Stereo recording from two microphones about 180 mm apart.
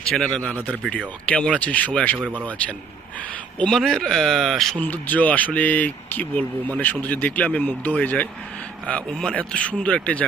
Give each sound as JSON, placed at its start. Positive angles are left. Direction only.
{"t": 0.0, "sound": "speech", "side_deg": 5}
{"t": 2.1, "sound": "speech", "side_deg": -10}
{"t": 3.6, "sound": "speech", "side_deg": 5}